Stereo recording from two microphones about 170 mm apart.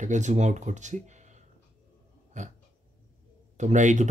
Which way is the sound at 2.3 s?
45° right (ahead or behind).